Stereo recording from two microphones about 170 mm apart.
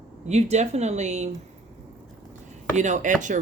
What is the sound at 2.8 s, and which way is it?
Speech, 45° right (ahead or behind).